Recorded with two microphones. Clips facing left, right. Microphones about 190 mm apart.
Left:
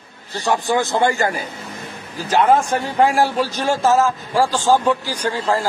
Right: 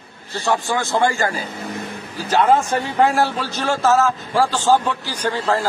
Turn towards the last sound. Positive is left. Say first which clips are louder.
# even
turn(degrees=10)  # may be behind; listen again after turning